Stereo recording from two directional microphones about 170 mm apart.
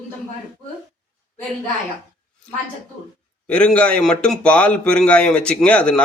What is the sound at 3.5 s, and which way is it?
Speech, 5° left (ahead or behind).